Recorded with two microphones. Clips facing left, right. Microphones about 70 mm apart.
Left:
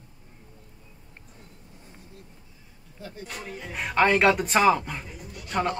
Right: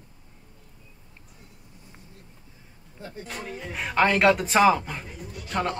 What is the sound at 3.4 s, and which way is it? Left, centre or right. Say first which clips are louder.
Speech: even; centre.